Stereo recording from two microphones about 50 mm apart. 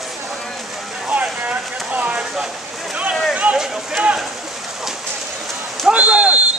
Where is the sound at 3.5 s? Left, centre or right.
Centre.